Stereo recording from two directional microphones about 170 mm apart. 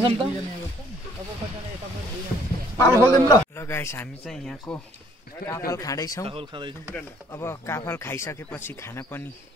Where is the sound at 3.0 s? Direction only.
15° left (ahead or behind).